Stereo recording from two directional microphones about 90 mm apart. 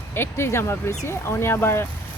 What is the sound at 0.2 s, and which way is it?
Speech, 30° left (ahead or behind).